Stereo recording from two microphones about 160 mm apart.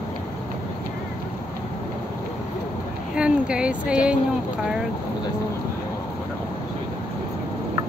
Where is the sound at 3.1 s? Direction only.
5° right (ahead or behind).